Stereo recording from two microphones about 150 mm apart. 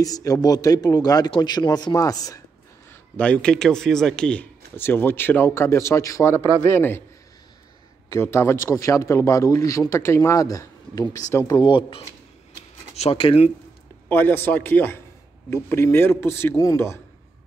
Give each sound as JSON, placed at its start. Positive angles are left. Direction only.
{"t": 0.0, "sound": "a man's voice", "side_deg": 25}
{"t": 2.9, "sound": "a man's voice", "side_deg": 10}
{"t": 8.1, "sound": "a man's voice", "side_deg": 15}
{"t": 14.0, "sound": "a man's voice", "side_deg": 15}